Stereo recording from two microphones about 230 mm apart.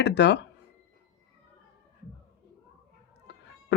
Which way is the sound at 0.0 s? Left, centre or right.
Left.